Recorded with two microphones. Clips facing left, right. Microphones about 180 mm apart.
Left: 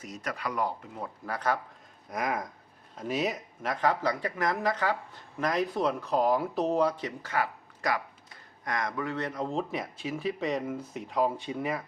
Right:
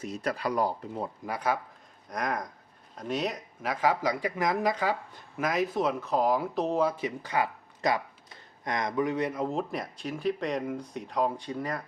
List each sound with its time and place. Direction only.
0.0 s speech: 30° right (ahead or behind)
1.2 s speech: 10° right (ahead or behind)
2.0 s speech: 5° left (ahead or behind)